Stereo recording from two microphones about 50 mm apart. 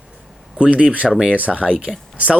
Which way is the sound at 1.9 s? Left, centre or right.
Centre.